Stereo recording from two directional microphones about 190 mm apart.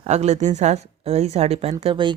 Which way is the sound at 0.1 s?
35° right (ahead or behind).